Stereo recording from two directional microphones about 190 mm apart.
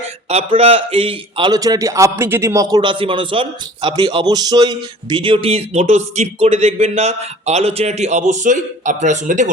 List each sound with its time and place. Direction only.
0.3 s a man's voice: 35° right (ahead or behind)